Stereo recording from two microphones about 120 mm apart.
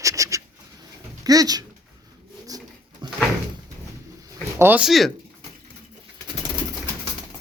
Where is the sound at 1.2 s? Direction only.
30° right (ahead or behind).